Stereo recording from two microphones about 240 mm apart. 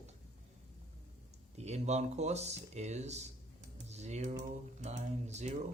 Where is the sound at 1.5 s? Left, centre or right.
Right.